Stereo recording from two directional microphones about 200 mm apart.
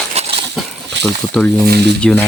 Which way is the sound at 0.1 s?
30° right (ahead or behind).